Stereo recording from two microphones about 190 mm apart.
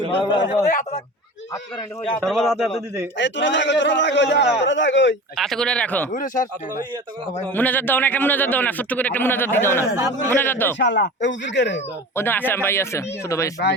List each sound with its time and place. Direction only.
0.2 s a man's voice: 25° left (ahead or behind)
0.7 s speech: 40° left (ahead or behind)
2.2 s speech: centre (ahead or behind)
3.2 s a man's voice: 70° left (ahead or behind)
5.4 s speech: centre (ahead or behind)
6.1 s speech: 45° left (ahead or behind)
7.4 s a man's voice: 10° left (ahead or behind)
10.8 s a man's voice: 70° left (ahead or behind)
12.1 s a man's voice: 10° left (ahead or behind)